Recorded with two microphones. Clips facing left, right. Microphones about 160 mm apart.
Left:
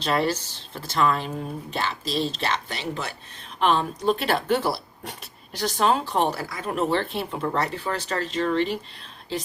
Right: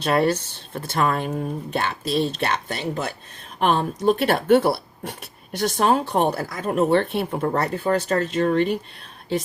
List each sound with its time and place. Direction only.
0.0 s speech: 55° right (ahead or behind)